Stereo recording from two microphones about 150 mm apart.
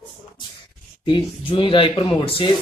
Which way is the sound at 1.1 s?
35° left (ahead or behind).